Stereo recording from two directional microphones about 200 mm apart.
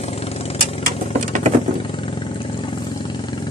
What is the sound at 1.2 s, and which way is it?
Patter, 40° right (ahead or behind).